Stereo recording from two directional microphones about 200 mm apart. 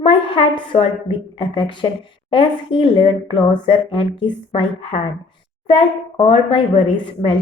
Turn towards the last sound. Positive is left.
turn(degrees=25)  # may be behind; listen again after turning